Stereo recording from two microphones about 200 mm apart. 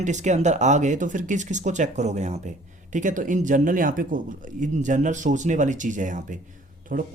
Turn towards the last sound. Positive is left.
turn(degrees=-40)  # may be behind; listen again after turning